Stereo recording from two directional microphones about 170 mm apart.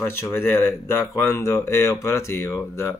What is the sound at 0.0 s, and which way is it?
Speech, 15° left (ahead or behind).